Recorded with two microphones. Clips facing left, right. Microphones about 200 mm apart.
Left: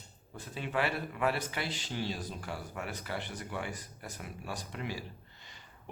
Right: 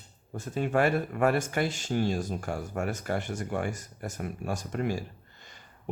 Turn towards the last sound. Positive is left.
turn(degrees=-45)  # may be behind; listen again after turning